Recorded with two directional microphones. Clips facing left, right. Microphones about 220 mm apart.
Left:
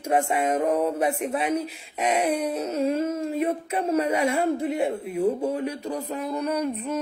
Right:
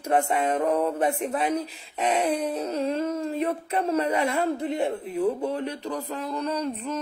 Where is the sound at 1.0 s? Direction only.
35° right (ahead or behind).